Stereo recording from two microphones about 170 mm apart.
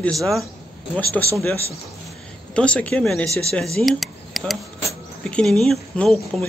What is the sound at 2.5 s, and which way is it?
Speech, 5° left (ahead or behind).